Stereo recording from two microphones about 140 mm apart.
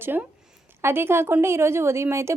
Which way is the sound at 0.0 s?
15° right (ahead or behind).